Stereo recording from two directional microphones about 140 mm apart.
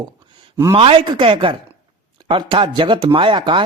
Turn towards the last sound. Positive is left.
turn(degrees=-35)  # may be behind; listen again after turning